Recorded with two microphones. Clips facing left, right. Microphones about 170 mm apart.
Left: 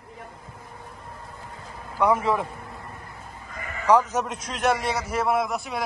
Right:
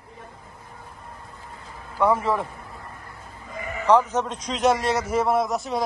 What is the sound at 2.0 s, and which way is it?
Speech, 15° left (ahead or behind).